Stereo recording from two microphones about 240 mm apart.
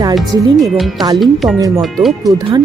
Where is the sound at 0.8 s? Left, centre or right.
Centre.